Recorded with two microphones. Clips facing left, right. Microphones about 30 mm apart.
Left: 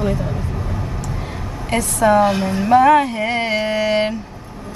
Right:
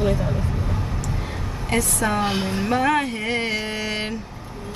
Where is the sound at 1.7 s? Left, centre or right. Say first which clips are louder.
Left 7 dB; centre.